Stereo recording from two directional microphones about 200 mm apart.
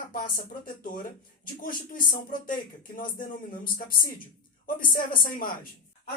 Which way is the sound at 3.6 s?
45° left (ahead or behind).